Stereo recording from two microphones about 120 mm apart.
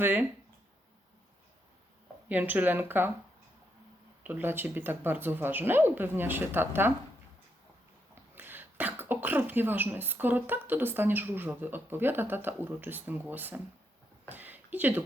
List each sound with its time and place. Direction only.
0.0 s speech: 15° right (ahead or behind)
2.3 s speech: 15° right (ahead or behind)
4.2 s speech: 15° right (ahead or behind)
8.4 s speech: 15° right (ahead or behind)
14.3 s a sound: 15° right (ahead or behind)